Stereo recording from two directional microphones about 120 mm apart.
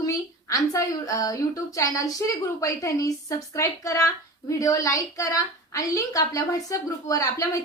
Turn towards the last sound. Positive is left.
turn(degrees=30)  # may be behind; listen again after turning